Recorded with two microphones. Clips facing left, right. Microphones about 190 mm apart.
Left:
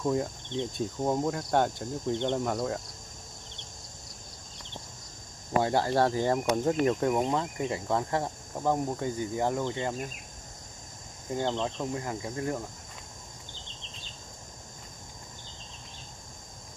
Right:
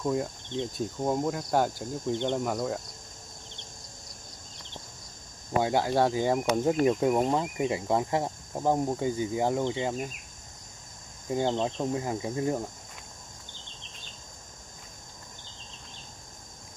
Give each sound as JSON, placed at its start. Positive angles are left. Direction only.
{"t": 0.0, "sound": "cricket", "side_deg": 0}
{"t": 5.6, "sound": "cricket", "side_deg": -5}
{"t": 6.9, "sound": "speech", "side_deg": -10}
{"t": 11.2, "sound": "cricket", "side_deg": -20}